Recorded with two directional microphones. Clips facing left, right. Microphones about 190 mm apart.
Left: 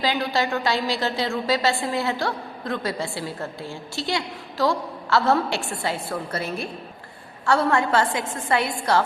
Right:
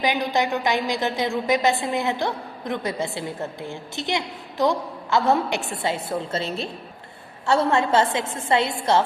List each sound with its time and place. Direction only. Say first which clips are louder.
0.0 s a woman's voice: right 1 dB; 20° right (ahead or behind)